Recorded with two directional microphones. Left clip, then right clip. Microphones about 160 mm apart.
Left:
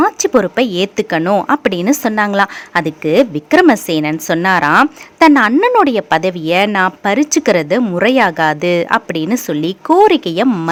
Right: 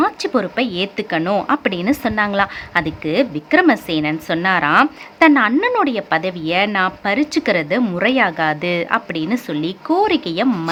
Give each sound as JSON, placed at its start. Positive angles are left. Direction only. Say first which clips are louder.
{"t": 0.0, "sound": "a woman's voice", "louder": "left 6 dB", "side_deg": 35}